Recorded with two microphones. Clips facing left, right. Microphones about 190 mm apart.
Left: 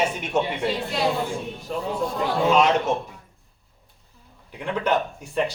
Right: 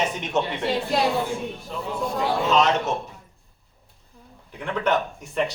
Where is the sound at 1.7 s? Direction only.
45° left (ahead or behind).